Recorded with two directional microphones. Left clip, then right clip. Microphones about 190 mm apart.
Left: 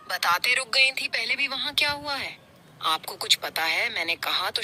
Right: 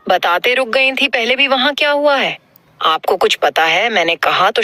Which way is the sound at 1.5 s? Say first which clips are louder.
Right 13 dB; 15° left (ahead or behind).